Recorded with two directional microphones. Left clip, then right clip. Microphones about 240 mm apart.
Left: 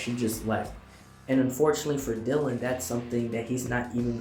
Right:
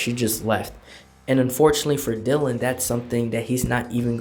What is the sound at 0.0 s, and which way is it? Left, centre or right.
Speech, right.